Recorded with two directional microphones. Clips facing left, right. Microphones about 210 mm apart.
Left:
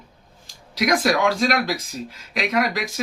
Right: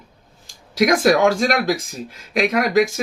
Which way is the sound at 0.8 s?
45° right (ahead or behind).